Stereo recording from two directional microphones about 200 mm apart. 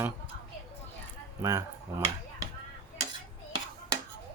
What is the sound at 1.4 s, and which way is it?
Speech, 15° right (ahead or behind).